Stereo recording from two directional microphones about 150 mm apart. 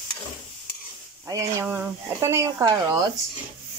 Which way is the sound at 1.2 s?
25° right (ahead or behind).